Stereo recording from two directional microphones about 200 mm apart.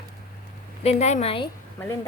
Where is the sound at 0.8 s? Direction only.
30° left (ahead or behind).